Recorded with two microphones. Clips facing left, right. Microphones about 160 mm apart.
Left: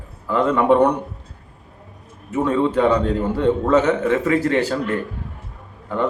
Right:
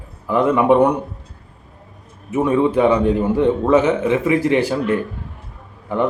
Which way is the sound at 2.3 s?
15° right (ahead or behind).